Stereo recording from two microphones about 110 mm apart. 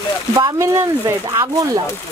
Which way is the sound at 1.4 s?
35° right (ahead or behind).